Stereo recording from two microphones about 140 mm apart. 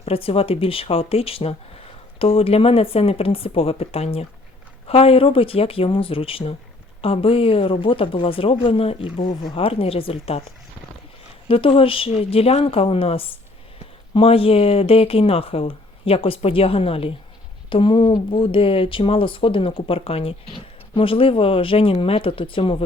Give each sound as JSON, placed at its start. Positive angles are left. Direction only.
{"t": 0.0, "sound": "speech", "side_deg": 40}
{"t": 11.4, "sound": "speech", "side_deg": 40}